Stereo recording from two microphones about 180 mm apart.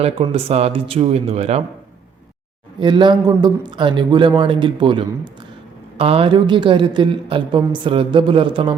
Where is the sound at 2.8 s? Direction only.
25° right (ahead or behind).